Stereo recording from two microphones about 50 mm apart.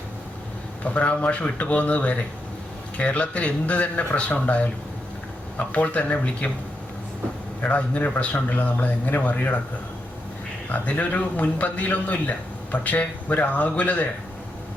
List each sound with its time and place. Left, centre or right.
0.9 s speech: left
7.6 s a man's voice: left
10.7 s a man's voice: left